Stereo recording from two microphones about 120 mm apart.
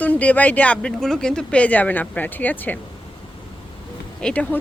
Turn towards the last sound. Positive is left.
turn(degrees=10)  # may be behind; listen again after turning